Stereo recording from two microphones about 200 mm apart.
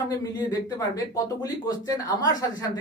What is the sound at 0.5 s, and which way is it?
Speech, 15° left (ahead or behind).